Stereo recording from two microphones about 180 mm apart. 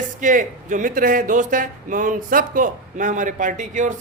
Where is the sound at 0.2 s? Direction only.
45° right (ahead or behind).